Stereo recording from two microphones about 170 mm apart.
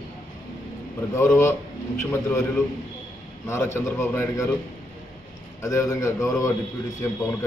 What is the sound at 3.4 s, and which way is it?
A man's voice, 15° left (ahead or behind).